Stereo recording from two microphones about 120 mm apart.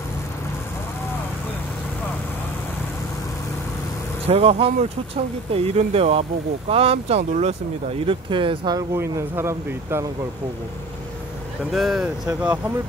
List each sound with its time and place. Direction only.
4.3 s speech: 55° right (ahead or behind)
8.0 s speech: 45° right (ahead or behind)
8.7 s speech: 25° right (ahead or behind)
11.7 s speech: centre (ahead or behind)